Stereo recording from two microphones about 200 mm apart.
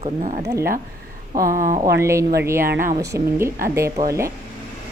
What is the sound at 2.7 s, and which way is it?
Speech, 45° right (ahead or behind).